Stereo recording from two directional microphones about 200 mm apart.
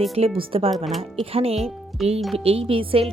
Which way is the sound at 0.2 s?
30° right (ahead or behind).